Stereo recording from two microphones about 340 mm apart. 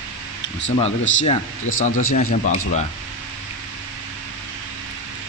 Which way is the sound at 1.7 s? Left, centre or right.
Left.